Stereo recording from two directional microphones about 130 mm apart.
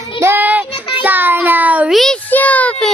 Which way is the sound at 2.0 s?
5° left (ahead or behind).